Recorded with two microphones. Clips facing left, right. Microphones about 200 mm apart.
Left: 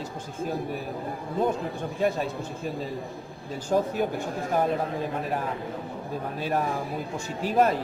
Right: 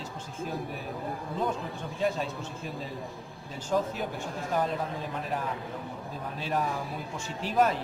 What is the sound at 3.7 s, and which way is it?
Speech, 45° left (ahead or behind).